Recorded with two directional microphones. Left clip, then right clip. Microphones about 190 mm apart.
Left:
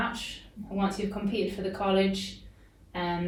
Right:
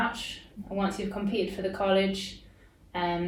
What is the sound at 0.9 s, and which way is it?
Speech, 15° right (ahead or behind).